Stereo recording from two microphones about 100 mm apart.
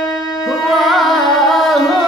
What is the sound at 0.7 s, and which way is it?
Music, centre (ahead or behind).